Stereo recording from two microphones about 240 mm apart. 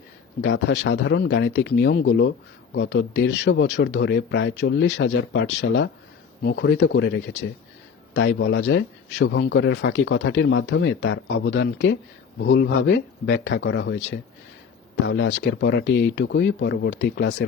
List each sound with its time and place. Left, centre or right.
0.4 s speech: left